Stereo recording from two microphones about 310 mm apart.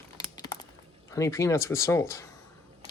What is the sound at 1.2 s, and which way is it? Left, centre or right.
Speech, centre.